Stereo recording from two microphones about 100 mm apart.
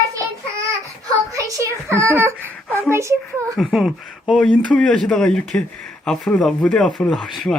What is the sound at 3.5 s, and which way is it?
Speech, centre (ahead or behind).